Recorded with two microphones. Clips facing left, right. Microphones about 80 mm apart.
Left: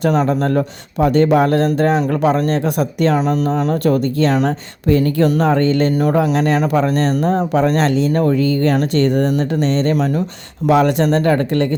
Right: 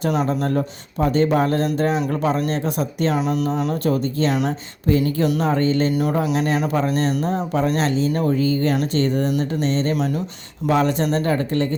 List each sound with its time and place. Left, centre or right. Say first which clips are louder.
0.3 s speech: left 5 dB; left
3.2 s speech: left 4 dB; left
3.8 s speech: left 5 dB; left
5.9 s speech: left 5 dB; left
9.9 s speech: left 5 dB; left
10.7 s speech: left 5 dB; left